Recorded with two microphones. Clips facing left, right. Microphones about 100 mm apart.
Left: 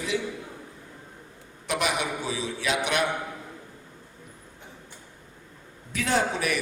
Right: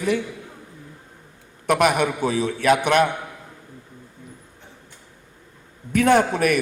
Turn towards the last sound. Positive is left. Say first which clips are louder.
# right 8 dB
turn(degrees=-55)  # may be behind; listen again after turning